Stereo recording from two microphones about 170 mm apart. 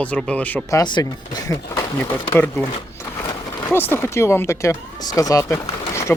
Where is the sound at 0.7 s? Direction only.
25° left (ahead or behind).